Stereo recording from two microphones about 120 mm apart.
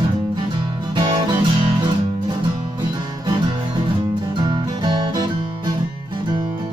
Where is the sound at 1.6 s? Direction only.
40° right (ahead or behind).